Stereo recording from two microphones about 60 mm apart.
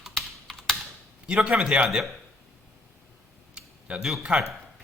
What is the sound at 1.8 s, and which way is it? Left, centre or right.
Speech, centre.